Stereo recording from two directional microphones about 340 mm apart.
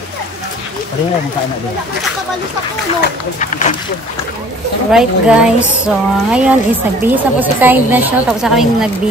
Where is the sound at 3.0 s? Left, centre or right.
Left.